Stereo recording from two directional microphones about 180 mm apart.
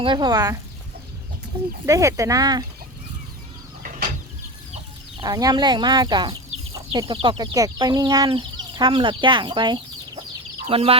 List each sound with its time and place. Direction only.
0.0 s speech: 25° right (ahead or behind)
1.9 s speech: 15° right (ahead or behind)
3.8 s a sound: 45° right (ahead or behind)
5.2 s speech: 20° right (ahead or behind)